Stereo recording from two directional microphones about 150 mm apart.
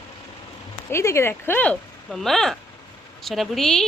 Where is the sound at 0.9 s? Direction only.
20° left (ahead or behind); by 3.9 s 5° left (ahead or behind).